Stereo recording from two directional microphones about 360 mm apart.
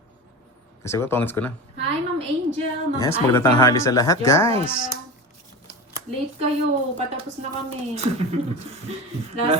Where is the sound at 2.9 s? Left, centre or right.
Centre.